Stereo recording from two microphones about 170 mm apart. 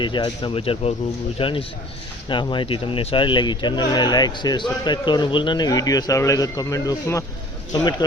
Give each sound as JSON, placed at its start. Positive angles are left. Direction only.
{"t": 0.0, "sound": "speech", "side_deg": 30}